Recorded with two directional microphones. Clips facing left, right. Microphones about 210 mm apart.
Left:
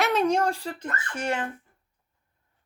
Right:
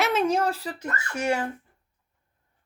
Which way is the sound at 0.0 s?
Centre (ahead or behind).